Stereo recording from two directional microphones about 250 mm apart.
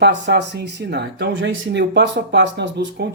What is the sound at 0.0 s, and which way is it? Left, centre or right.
Speech, right.